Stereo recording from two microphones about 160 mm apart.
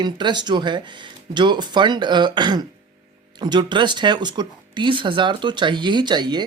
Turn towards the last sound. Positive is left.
turn(degrees=-25)  # may be behind; listen again after turning